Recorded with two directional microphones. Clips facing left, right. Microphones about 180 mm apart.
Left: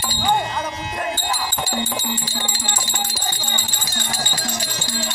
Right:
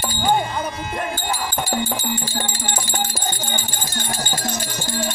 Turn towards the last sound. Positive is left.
turn(degrees=-50)  # may be behind; listen again after turning